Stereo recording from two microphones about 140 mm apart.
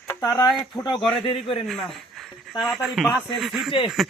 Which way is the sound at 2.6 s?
Centre (ahead or behind).